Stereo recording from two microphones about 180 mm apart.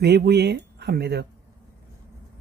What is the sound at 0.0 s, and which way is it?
Speech, 65° right (ahead or behind).